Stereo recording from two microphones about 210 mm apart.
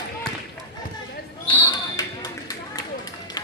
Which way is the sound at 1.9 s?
15° left (ahead or behind).